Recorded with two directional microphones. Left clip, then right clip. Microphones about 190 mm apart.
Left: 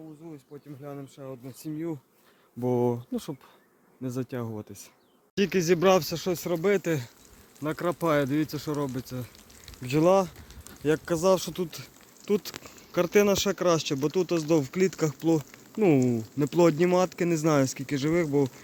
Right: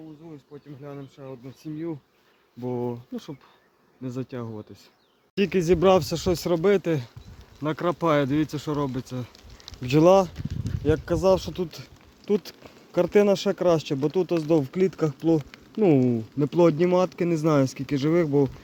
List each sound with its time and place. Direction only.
0.2 s bee: 35° left (ahead or behind)
0.9 s speech: 40° left (ahead or behind)
2.6 s speech: 70° left (ahead or behind)
4.0 s speech: 30° left (ahead or behind)
5.3 s speech: 5° right (ahead or behind)
9.8 s speech: 15° right (ahead or behind)
10.5 s speech: 5° left (ahead or behind)